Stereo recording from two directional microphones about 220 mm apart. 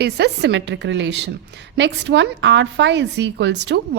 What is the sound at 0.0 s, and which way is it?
A woman's voice, 50° right (ahead or behind).